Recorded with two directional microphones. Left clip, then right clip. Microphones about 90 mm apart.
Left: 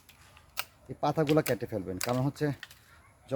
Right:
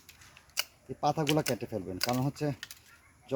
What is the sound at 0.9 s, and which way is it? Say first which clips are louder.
Speech: left 2 dB; 45° left (ahead or behind).